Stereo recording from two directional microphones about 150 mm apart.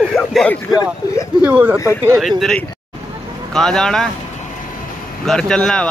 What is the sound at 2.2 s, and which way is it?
Speech, centre (ahead or behind).